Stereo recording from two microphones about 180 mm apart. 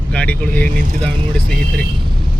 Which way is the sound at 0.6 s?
45° right (ahead or behind).